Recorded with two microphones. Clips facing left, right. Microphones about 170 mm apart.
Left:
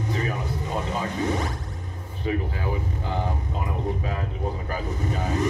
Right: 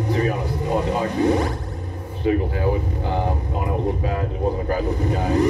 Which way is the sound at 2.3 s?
40° right (ahead or behind).